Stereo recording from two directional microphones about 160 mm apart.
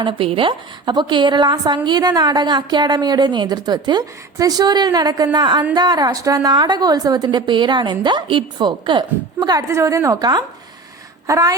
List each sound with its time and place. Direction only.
0.0 s a woman's voice: 35° right (ahead or behind)